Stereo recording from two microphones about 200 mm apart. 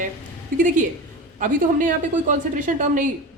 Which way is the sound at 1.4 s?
40° right (ahead or behind).